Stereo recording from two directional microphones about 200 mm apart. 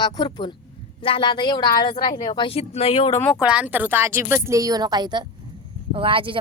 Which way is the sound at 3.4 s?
5° right (ahead or behind).